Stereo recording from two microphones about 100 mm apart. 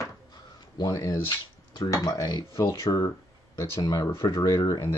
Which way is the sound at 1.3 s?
45° left (ahead or behind).